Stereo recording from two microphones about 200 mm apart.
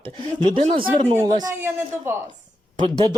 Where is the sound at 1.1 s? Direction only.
20° right (ahead or behind).